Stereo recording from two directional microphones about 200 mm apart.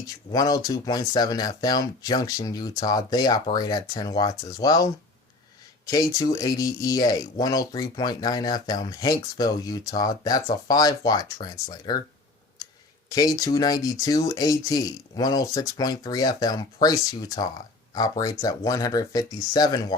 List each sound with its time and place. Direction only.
0.3 s speech: 20° left (ahead or behind)
6.1 s speech: 15° left (ahead or behind)
13.1 s speech: 20° left (ahead or behind)